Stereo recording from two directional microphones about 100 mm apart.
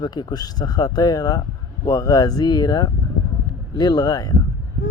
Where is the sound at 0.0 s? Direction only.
45° left (ahead or behind).